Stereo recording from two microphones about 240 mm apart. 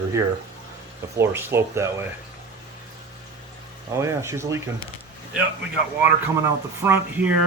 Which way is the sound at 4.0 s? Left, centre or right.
Centre.